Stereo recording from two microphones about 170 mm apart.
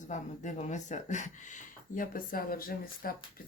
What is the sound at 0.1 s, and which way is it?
Speech, 45° left (ahead or behind).